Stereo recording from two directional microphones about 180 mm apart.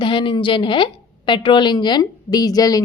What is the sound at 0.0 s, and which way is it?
A woman's voice, 25° left (ahead or behind).